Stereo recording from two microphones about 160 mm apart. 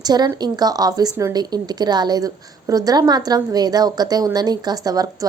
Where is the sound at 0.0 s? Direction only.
25° right (ahead or behind).